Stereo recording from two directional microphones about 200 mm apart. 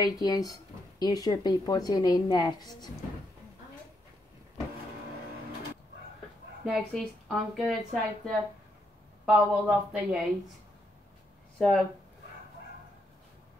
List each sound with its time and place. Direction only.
0.0 s speech: 20° left (ahead or behind)
6.6 s a woman's voice: centre (ahead or behind)
9.2 s a woman's voice: 5° right (ahead or behind)
11.5 s speech: 5° left (ahead or behind)